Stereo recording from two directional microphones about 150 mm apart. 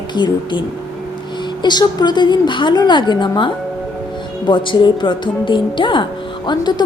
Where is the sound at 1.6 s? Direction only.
30° left (ahead or behind).